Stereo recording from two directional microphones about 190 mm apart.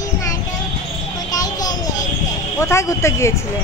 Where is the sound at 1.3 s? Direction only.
20° left (ahead or behind).